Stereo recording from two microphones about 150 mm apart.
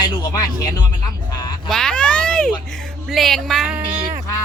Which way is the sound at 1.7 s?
5° left (ahead or behind).